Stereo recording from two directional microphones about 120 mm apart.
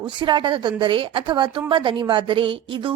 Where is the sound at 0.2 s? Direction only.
40° right (ahead or behind).